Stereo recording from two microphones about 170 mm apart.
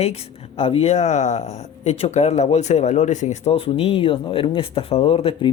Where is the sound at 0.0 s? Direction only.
40° left (ahead or behind).